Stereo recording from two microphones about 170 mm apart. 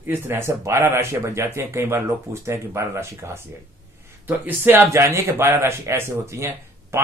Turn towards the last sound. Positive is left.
turn(degrees=-15)  # may be behind; listen again after turning